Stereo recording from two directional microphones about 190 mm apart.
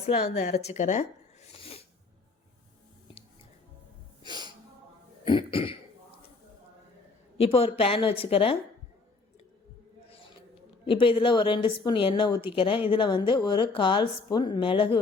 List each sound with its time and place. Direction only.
0.0 s speech: 30° left (ahead or behind)
5.2 s speech: 25° left (ahead or behind)
7.3 s speech: 30° left (ahead or behind)
10.8 s speech: 25° left (ahead or behind)